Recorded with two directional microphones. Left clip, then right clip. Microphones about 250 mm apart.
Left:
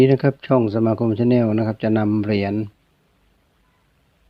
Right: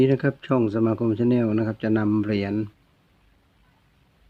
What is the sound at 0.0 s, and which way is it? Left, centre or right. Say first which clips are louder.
Speech: left 5 dB; centre.